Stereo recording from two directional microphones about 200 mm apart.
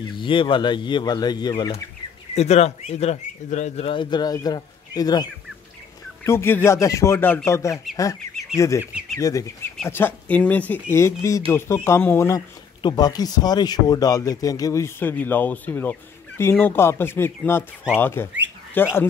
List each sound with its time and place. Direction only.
0.2 s speech: 25° left (ahead or behind)
2.3 s speech: 35° left (ahead or behind); by 18.9 s 10° left (ahead or behind)